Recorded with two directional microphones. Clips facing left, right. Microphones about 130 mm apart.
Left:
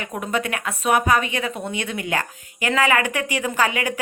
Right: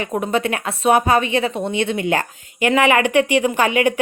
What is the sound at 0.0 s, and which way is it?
Speech, 25° right (ahead or behind).